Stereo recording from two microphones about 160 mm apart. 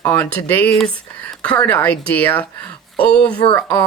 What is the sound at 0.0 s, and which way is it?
Speech, 10° left (ahead or behind).